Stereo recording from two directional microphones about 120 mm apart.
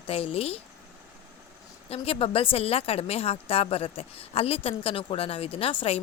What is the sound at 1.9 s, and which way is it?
Speech, 50° left (ahead or behind).